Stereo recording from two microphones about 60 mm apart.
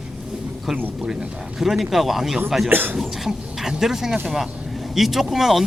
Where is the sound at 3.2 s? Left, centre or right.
Centre.